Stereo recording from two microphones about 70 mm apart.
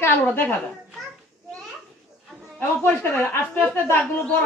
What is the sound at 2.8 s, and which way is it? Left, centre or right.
Speech, left.